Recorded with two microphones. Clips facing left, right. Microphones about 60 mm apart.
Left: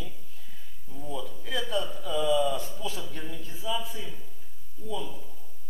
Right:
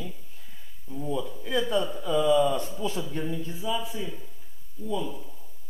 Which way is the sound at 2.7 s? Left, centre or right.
Right.